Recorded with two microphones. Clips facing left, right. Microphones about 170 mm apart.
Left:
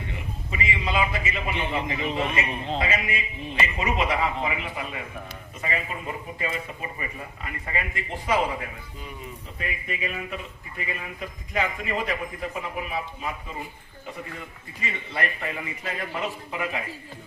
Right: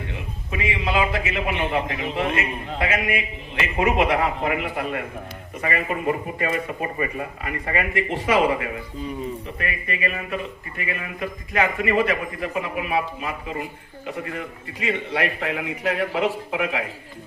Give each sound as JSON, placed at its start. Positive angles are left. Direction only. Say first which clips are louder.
{"t": 0.1, "sound": "a man's voice", "louder": "right 3 dB", "side_deg": -70}